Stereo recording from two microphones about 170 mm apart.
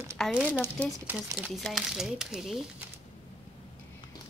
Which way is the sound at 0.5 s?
15° left (ahead or behind).